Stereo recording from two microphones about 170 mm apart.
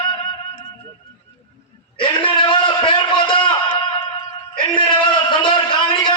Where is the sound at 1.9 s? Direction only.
30° left (ahead or behind).